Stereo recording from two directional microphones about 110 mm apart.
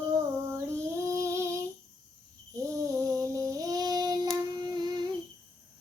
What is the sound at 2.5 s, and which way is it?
Child singing, 30° right (ahead or behind).